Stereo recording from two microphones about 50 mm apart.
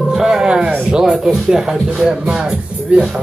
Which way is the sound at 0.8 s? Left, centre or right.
Centre.